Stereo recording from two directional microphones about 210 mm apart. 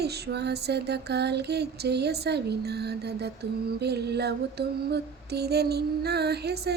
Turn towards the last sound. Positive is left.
turn(degrees=-50)  # may be behind; listen again after turning